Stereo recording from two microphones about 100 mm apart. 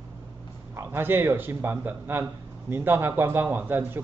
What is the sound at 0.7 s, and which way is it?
Speech, 20° right (ahead or behind).